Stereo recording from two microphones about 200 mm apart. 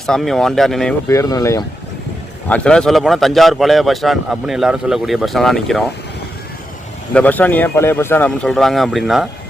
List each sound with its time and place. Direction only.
0.0 s a man's voice: centre (ahead or behind)
1.0 s speech: 15° left (ahead or behind)
2.5 s a man's voice: 5° left (ahead or behind)
7.1 s speech: 5° left (ahead or behind)